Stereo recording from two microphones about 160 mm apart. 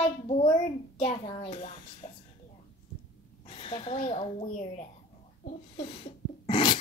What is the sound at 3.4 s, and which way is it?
Speech, 35° left (ahead or behind).